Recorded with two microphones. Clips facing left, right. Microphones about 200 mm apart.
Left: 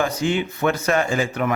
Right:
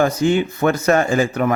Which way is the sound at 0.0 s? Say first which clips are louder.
Right 5 dB; 45° right (ahead or behind).